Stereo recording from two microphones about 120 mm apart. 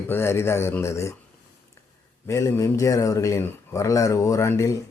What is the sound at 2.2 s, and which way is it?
Speech, 25° left (ahead or behind).